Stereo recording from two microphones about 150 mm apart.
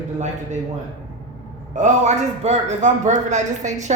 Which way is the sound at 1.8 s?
50° right (ahead or behind).